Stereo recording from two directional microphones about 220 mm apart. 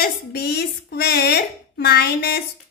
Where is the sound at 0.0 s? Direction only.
45° left (ahead or behind).